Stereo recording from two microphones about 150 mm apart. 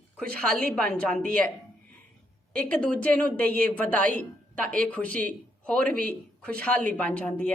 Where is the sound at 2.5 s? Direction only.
10° left (ahead or behind).